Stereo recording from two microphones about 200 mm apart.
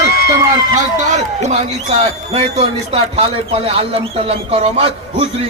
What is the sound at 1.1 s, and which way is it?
A man's voice, 35° right (ahead or behind).